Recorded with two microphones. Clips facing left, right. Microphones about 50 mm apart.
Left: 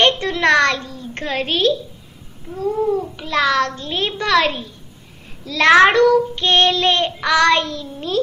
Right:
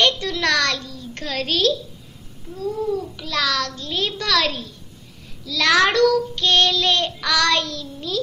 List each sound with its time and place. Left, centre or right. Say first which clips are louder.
0.0 s a sound: left 4 dB; left
2.5 s child singing: left 5 dB; left
5.4 s child singing: left 6 dB; left